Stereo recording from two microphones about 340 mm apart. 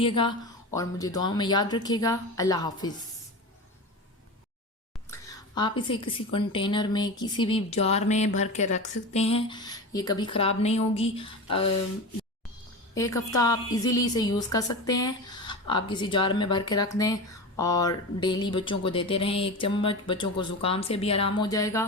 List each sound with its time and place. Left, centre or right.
0.0 s a woman's voice: centre
5.1 s a woman's voice: centre
12.9 s a woman's voice: centre